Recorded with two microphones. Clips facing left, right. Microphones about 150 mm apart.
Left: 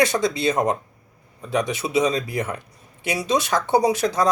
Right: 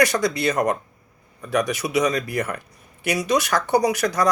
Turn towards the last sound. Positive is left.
turn(degrees=25)  # may be behind; listen again after turning